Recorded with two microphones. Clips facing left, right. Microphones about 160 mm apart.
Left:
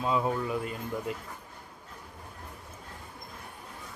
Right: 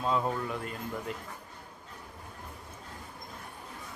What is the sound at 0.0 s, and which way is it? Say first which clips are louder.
Speech: left 2 dB; 5° left (ahead or behind).